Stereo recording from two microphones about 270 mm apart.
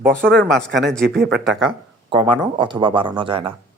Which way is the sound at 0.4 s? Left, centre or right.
Centre.